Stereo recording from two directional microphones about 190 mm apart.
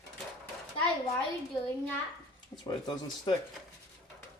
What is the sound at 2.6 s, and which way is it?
Speech, 25° left (ahead or behind).